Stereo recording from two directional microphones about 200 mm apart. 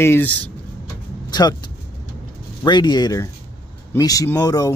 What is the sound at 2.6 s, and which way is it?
Speech, 20° left (ahead or behind).